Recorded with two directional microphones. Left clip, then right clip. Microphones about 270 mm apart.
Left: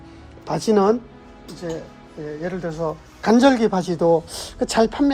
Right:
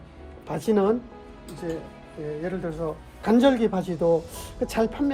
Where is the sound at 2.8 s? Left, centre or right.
Left.